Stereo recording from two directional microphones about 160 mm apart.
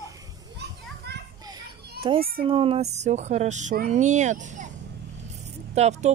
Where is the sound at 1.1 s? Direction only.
90° right.